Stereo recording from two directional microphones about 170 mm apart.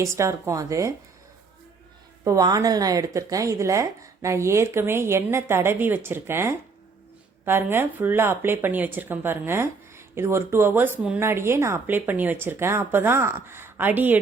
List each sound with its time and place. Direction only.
0.0 s speech: 15° right (ahead or behind)
2.2 s speech: 20° right (ahead or behind)